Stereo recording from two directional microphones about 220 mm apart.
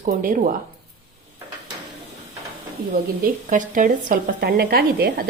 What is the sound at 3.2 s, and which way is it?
A woman's voice, 35° right (ahead or behind).